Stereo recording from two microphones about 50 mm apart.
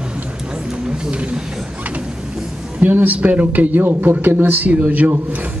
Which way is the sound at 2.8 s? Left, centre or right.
Right.